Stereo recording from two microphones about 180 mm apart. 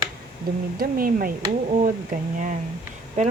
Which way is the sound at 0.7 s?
55° right (ahead or behind).